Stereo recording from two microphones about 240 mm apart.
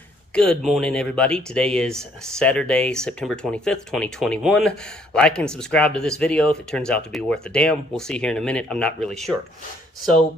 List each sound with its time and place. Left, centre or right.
0.3 s speech: centre